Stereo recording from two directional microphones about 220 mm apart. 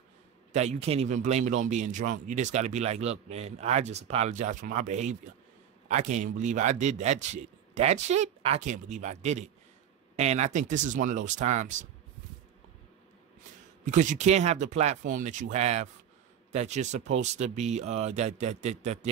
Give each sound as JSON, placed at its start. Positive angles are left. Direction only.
{"t": 0.5, "sound": "a man's voice", "side_deg": -30}
{"t": 13.8, "sound": "a man's voice", "side_deg": -35}